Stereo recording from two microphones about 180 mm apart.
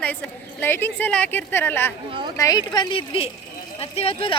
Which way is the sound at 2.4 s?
20° left (ahead or behind).